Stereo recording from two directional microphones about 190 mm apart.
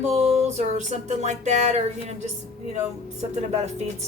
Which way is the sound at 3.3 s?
35° right (ahead or behind).